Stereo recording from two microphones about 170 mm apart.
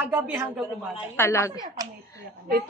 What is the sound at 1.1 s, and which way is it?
Speech, 15° left (ahead or behind).